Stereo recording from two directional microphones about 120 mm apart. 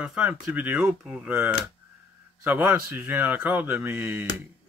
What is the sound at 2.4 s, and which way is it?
Speech, 15° right (ahead or behind).